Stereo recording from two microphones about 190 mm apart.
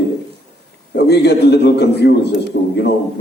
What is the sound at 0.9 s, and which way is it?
A man's voice, 60° left (ahead or behind).